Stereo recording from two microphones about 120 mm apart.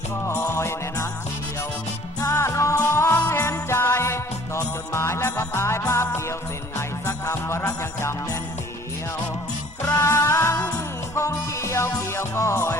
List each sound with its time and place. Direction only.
0.3 s music: 20° left (ahead or behind)
2.2 s music: 20° left (ahead or behind)
9.8 s music: 25° left (ahead or behind)